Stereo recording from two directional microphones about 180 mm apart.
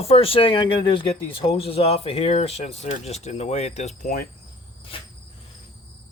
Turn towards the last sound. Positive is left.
turn(degrees=30)  # may be behind; listen again after turning